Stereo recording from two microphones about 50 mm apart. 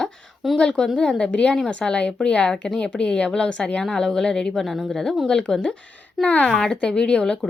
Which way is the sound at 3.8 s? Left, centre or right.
Centre.